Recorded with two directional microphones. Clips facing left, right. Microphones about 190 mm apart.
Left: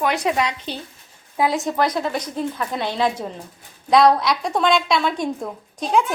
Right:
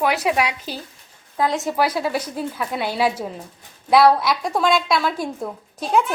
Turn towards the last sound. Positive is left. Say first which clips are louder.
# even
turn(degrees=-5)  # may be behind; listen again after turning